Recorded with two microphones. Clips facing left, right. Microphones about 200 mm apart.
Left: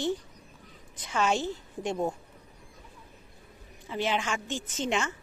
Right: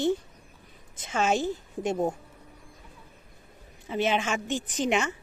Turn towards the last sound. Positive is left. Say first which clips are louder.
# right 4 dB
turn(degrees=-20)  # may be behind; listen again after turning